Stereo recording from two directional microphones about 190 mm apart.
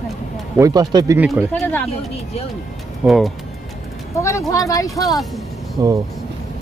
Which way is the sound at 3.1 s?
Centre (ahead or behind).